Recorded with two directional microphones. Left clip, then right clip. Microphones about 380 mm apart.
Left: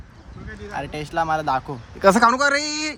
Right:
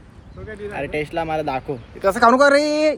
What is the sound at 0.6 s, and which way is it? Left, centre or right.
Speech, centre.